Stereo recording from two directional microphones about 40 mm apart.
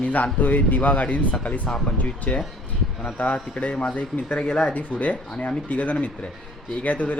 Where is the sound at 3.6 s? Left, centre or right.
Left.